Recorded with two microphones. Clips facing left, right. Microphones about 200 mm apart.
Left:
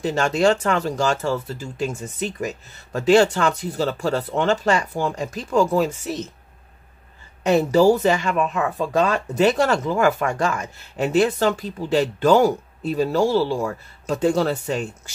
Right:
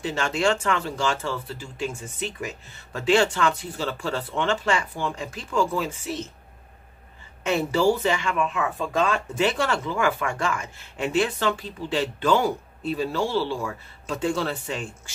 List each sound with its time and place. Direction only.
0.0 s speech: 40° left (ahead or behind)
7.4 s speech: 40° left (ahead or behind)